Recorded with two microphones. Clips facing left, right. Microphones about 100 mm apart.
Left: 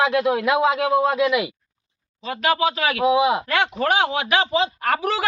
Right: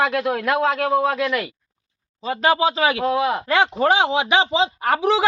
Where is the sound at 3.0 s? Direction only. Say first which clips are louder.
Left 3 dB; 10° left (ahead or behind).